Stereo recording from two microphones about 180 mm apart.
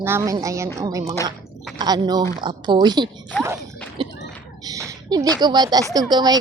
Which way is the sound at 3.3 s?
10° left (ahead or behind).